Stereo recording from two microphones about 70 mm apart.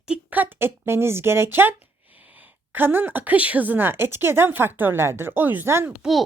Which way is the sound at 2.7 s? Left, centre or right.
Right.